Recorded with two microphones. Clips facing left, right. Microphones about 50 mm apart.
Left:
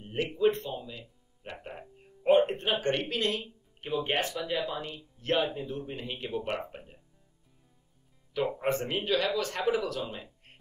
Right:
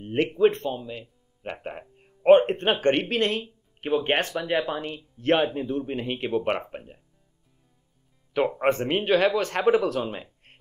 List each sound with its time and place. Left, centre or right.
0.0 s speech: right
8.5 s speech: right